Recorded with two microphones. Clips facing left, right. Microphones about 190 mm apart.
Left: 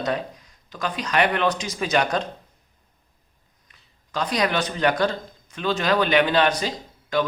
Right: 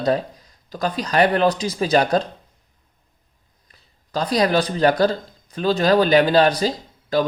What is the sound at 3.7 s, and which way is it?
Speech, 35° right (ahead or behind).